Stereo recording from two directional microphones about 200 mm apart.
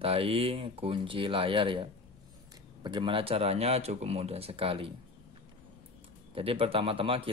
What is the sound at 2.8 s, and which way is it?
Speech, 25° right (ahead or behind).